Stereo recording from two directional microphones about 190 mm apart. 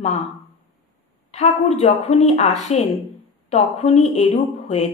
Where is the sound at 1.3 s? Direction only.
35° left (ahead or behind).